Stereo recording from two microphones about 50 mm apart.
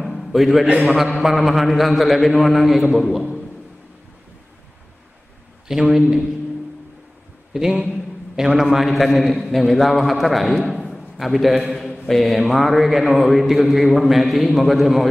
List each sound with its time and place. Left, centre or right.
0.0 s a sound: centre
0.8 s a man's voice: centre
5.7 s a man's voice: centre
8.4 s a man's voice: centre
8.7 s a man's voice: centre
10.9 s a sound: centre
11.9 s a man's voice: centre